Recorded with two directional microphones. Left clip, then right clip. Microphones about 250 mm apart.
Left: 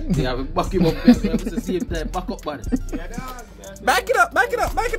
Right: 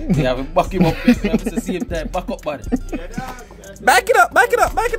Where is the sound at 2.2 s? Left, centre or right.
Right.